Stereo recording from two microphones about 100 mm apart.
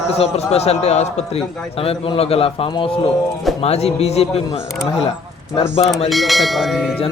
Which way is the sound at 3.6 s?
90° left.